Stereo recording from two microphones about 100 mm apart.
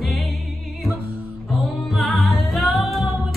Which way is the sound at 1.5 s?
Centre (ahead or behind).